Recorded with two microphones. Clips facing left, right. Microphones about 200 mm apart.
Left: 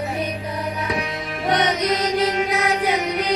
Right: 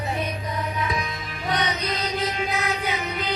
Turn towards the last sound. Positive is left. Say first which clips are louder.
# left 6 dB
turn(degrees=75)  # may be behind; listen again after turning